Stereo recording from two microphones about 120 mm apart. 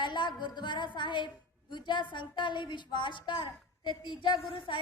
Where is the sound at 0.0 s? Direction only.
40° left (ahead or behind).